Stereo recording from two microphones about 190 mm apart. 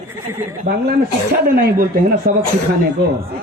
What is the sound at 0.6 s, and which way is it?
A man's voice, 55° right (ahead or behind).